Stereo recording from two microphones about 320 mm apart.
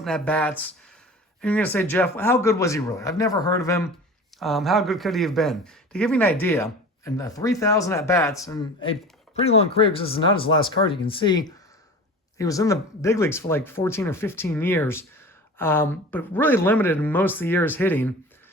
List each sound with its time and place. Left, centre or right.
0.0 s speech: centre